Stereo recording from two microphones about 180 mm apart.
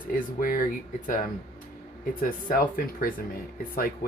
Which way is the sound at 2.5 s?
50° left (ahead or behind).